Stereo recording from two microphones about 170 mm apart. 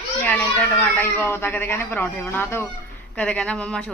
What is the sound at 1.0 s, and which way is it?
A man's voice, 15° left (ahead or behind).